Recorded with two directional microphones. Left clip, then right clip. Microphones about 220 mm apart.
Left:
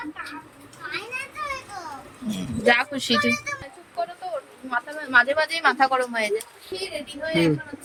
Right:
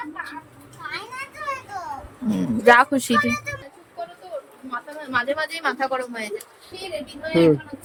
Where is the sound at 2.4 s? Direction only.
20° right (ahead or behind).